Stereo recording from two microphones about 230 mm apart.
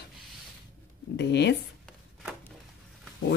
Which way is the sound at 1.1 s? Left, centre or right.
Left.